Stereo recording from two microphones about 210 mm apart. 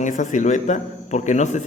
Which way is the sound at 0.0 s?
35° left (ahead or behind).